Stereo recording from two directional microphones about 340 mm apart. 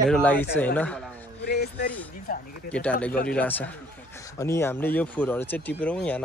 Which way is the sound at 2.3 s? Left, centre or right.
Left.